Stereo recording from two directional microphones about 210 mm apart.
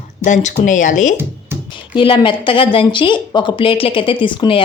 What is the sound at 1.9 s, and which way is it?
Speech, 25° left (ahead or behind).